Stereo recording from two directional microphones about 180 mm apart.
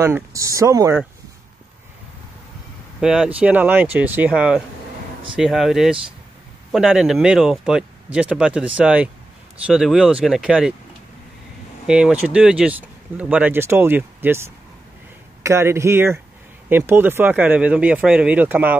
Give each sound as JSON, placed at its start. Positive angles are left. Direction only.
{"t": 0.0, "sound": "speech", "side_deg": -15}
{"t": 3.0, "sound": "speech", "side_deg": -5}
{"t": 11.8, "sound": "speech", "side_deg": -5}